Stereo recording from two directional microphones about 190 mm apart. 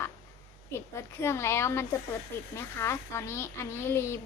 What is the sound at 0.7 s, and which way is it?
Speech, 15° left (ahead or behind).